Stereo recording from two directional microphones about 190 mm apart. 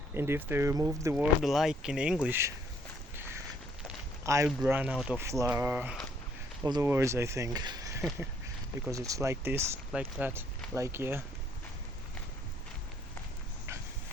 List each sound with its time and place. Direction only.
0.1 s speech: 10° right (ahead or behind)
3.8 s a sound: 15° right (ahead or behind)
4.4 s speech: 5° right (ahead or behind)